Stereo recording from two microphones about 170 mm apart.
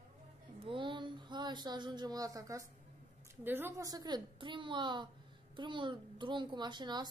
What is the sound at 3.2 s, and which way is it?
A woman's voice, 10° right (ahead or behind).